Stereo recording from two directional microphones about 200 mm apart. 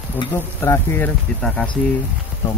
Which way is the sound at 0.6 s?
10° left (ahead or behind).